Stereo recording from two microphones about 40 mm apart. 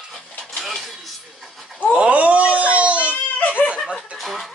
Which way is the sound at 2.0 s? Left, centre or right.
Right.